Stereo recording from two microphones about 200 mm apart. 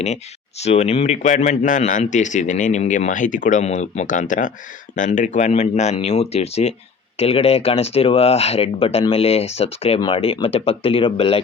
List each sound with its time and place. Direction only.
0.6 s a man's voice: 30° left (ahead or behind)